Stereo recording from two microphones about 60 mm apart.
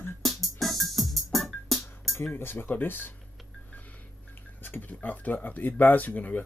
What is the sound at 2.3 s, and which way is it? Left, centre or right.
Speech, left.